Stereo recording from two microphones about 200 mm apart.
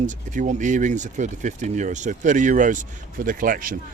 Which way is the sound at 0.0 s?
40° right (ahead or behind).